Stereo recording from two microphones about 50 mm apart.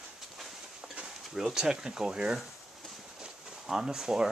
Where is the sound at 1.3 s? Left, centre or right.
Centre.